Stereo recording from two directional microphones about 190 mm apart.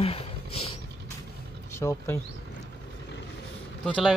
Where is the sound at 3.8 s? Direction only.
5° left (ahead or behind).